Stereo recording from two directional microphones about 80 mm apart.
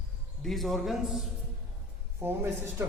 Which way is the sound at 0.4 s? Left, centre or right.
Centre.